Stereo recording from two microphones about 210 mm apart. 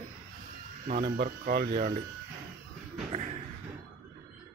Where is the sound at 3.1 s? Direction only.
35° right (ahead or behind).